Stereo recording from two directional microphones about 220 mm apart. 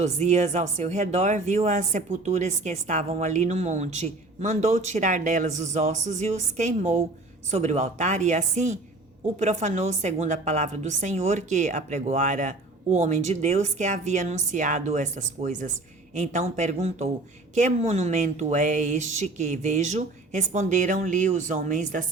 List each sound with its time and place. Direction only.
0.0 s speech: 30° right (ahead or behind)